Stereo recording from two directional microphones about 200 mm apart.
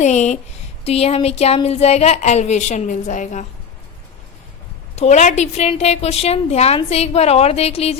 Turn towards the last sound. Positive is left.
turn(degrees=30)  # may be behind; listen again after turning